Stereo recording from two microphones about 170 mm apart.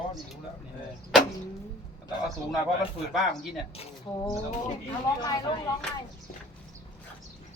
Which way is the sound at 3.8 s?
25° left (ahead or behind).